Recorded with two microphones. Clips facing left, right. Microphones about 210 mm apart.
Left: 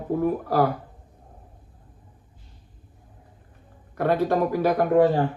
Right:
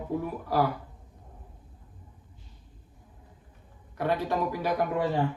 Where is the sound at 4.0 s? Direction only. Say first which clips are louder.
Left 6 dB; 50° left (ahead or behind).